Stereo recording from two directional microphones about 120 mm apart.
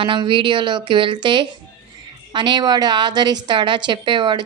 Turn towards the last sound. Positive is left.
turn(degrees=-40)  # may be behind; listen again after turning